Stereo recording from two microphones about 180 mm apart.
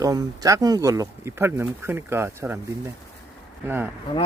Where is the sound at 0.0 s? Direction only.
20° right (ahead or behind).